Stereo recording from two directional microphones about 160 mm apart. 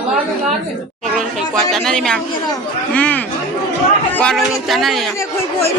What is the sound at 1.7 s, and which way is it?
Speech, 5° left (ahead or behind).